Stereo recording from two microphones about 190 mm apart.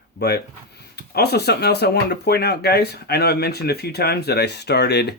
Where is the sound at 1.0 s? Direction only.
55° left (ahead or behind).